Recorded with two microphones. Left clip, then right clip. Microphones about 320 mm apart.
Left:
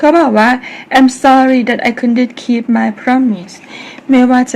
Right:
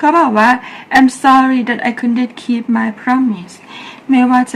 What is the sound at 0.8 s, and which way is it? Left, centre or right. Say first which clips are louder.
A woman's voice: left 1 dB; centre.